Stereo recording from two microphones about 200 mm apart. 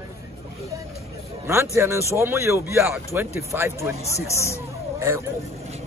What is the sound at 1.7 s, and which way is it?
A man's voice, 15° right (ahead or behind).